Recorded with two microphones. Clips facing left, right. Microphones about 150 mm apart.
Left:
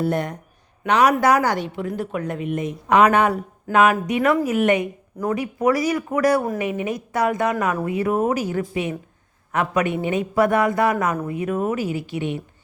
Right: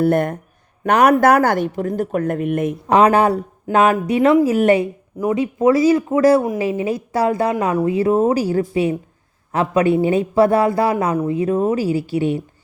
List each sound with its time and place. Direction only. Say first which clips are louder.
0.0 s speech: right 6 dB; 55° right (ahead or behind)
2.9 s a man's voice: right 3 dB; 35° right (ahead or behind)
5.2 s a man's voice: right 5 dB; 20° right (ahead or behind)